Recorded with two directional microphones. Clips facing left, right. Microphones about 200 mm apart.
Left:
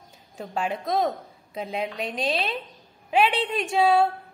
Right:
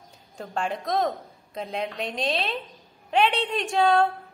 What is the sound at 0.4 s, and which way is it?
A woman's voice, 5° left (ahead or behind).